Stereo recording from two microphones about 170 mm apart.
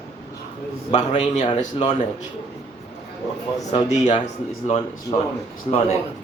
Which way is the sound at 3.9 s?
45° left (ahead or behind).